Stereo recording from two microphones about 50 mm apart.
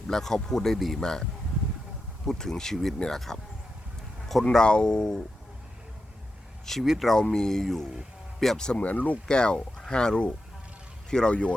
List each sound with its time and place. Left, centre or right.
0.1 s speech: centre
2.2 s speech: centre
4.4 s speech: centre
6.7 s speech: centre
8.8 s speech: left
9.2 s speech: centre